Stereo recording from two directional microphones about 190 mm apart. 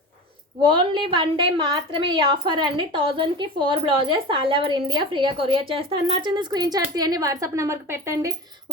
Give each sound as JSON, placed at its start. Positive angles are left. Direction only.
{"t": 0.6, "sound": "a woman's voice", "side_deg": -25}